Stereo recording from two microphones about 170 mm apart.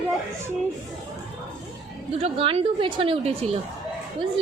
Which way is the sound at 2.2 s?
35° right (ahead or behind).